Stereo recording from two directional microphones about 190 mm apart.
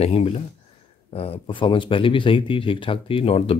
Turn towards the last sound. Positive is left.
turn(degrees=30)  # may be behind; listen again after turning